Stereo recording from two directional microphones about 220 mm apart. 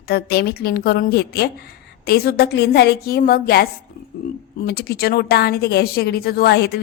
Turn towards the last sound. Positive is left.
turn(degrees=50)  # may be behind; listen again after turning